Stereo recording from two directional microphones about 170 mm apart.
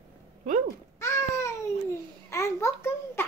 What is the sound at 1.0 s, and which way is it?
Babbling, 15° left (ahead or behind).